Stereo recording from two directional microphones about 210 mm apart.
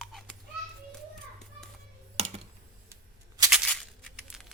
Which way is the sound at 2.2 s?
30° right (ahead or behind).